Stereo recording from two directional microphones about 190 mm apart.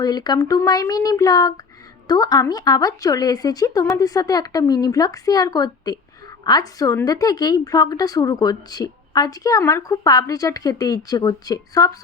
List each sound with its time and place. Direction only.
0.0 s a woman's voice: 20° left (ahead or behind)